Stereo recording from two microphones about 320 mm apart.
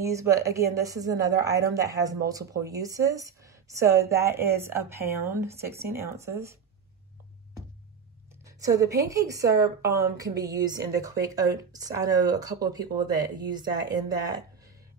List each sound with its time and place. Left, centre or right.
0.0 s speech: centre
8.5 s speech: centre